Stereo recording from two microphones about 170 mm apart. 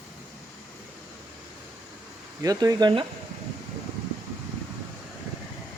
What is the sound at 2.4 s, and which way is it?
Speech, 20° right (ahead or behind).